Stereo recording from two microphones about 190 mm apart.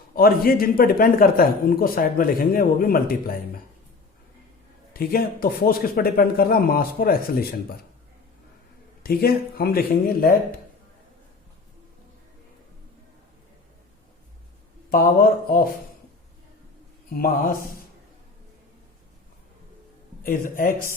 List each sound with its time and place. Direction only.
0.1 s a man's voice: 50° left (ahead or behind)
4.9 s a man's voice: 50° left (ahead or behind)
9.0 s a man's voice: 55° left (ahead or behind)
14.8 s a man's voice: 50° left (ahead or behind)
20.2 s a man's voice: 45° left (ahead or behind)